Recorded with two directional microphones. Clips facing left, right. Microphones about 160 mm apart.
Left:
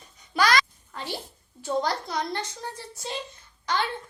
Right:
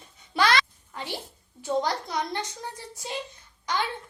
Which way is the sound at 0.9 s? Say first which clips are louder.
Left 1 dB; 15° right (ahead or behind).